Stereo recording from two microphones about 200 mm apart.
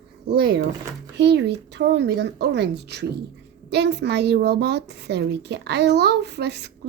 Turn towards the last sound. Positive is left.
turn(degrees=-55)  # may be behind; listen again after turning